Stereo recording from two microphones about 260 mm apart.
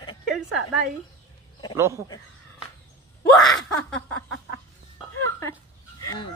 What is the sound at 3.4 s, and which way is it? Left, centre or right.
Laughter, centre.